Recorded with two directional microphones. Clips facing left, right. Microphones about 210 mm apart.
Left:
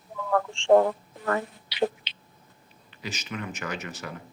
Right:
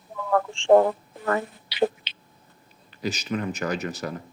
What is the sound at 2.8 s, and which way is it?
Speech, 40° right (ahead or behind).